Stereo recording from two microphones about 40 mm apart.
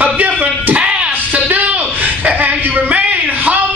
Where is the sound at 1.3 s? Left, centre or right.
Right.